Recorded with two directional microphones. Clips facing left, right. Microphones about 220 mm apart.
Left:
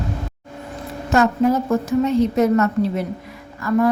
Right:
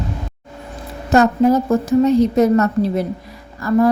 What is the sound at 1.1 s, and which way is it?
A woman's voice, 40° right (ahead or behind).